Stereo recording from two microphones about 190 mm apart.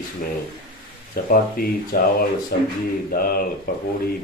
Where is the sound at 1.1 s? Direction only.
50° left (ahead or behind).